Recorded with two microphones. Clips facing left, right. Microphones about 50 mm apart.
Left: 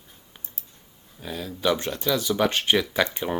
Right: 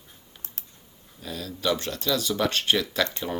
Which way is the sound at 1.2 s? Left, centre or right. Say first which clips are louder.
Left 3 dB; left.